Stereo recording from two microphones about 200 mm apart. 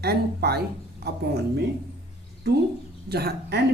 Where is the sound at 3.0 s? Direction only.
50° right (ahead or behind).